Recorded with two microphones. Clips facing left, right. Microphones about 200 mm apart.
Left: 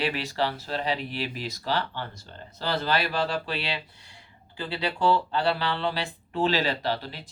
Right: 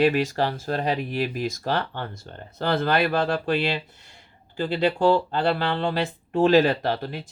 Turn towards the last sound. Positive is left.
turn(degrees=-50)  # may be behind; listen again after turning